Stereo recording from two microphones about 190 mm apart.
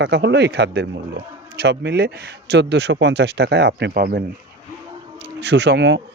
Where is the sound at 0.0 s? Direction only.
65° right (ahead or behind).